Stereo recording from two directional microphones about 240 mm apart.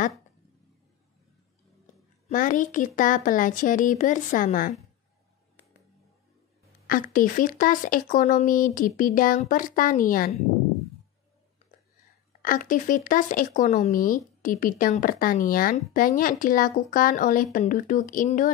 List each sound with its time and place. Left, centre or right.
2.2 s speech: left
6.9 s speech: left
12.3 s speech: left